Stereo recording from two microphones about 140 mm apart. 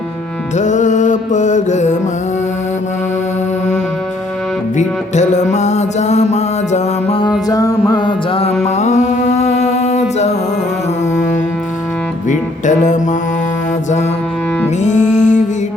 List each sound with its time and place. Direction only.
0.5 s music: 60° left (ahead or behind)
4.8 s music: 55° left (ahead or behind)
7.2 s music: 30° left (ahead or behind)
8.6 s mantra: 55° left (ahead or behind)
12.3 s music: 60° left (ahead or behind)
14.8 s music: 60° left (ahead or behind)